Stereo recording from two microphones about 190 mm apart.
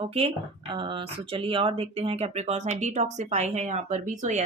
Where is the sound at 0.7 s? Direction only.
25° right (ahead or behind).